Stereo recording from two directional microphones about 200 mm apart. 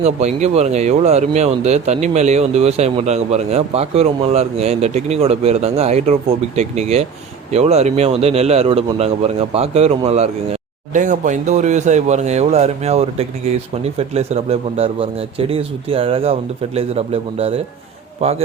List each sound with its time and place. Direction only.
0.0 s a man's voice: 35° right (ahead or behind)